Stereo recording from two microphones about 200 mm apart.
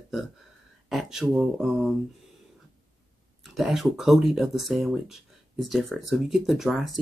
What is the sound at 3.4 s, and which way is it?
Speech, centre (ahead or behind).